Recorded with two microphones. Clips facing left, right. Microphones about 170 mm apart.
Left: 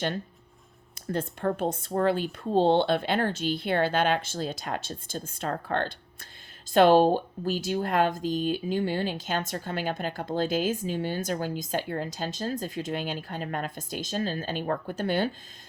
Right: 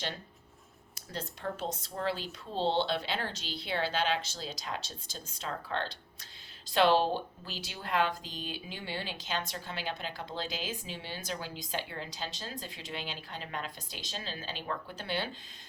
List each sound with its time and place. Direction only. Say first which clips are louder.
1.0 s speech: left 10 dB; 55° left (ahead or behind)